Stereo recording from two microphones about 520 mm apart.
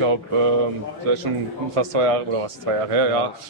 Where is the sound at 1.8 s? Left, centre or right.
Right.